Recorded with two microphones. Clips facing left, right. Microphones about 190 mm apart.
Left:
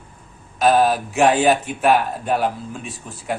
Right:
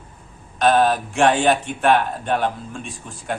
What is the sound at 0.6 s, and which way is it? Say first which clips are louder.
Speech: left 1 dB; 5° left (ahead or behind).